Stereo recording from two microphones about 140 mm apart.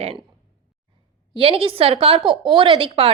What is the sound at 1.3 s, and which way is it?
A woman's voice, 40° right (ahead or behind).